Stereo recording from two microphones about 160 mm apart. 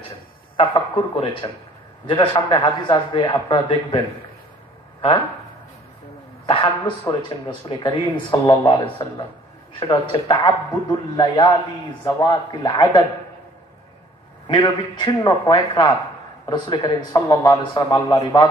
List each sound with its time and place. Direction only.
0.6 s speech: 30° left (ahead or behind)
6.4 s a man's voice: 35° left (ahead or behind)
14.5 s a man's voice: 30° left (ahead or behind)